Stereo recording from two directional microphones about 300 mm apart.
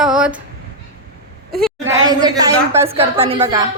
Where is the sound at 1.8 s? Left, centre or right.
Centre.